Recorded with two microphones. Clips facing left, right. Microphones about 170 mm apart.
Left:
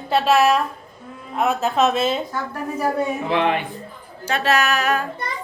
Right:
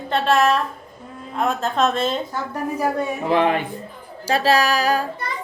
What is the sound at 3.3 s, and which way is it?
Music, 40° right (ahead or behind).